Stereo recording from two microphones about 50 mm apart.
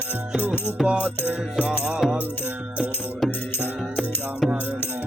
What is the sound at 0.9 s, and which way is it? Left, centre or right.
Music, left.